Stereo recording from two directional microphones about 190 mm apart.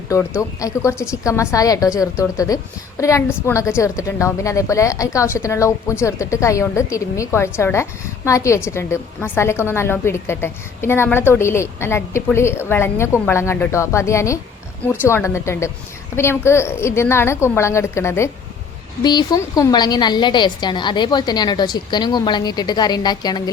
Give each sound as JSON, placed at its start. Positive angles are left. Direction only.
{"t": 0.6, "sound": "a woman's voice", "side_deg": 15}